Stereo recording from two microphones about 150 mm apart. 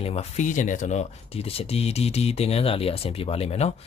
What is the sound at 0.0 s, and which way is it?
Speech, 45° left (ahead or behind).